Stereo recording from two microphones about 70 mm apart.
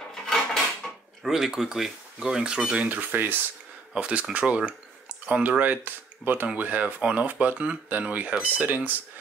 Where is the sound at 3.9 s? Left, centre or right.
Centre.